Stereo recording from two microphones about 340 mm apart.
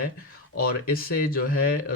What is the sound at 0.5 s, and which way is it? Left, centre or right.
Speech, left.